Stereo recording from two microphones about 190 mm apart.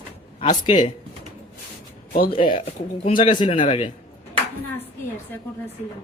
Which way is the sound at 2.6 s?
30° left (ahead or behind).